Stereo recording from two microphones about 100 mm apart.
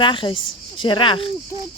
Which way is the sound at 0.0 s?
55° left (ahead or behind).